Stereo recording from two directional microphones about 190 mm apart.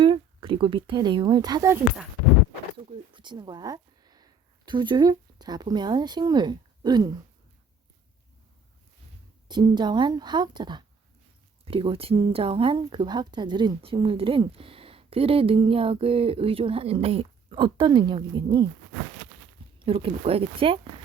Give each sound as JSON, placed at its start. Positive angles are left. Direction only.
{"t": 0.0, "sound": "speech", "side_deg": -25}
{"t": 3.1, "sound": "speech", "side_deg": -25}
{"t": 9.5, "sound": "speech", "side_deg": -20}
{"t": 19.8, "sound": "speech", "side_deg": -30}